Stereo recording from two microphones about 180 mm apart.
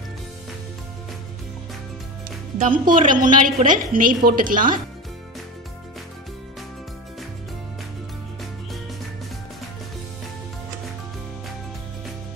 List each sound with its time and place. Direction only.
2.6 s a woman's voice: 45° right (ahead or behind)